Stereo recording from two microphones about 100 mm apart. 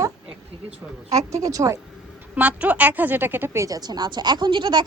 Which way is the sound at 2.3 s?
15° right (ahead or behind).